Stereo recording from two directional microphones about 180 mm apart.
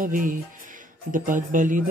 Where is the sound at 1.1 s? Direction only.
45° right (ahead or behind).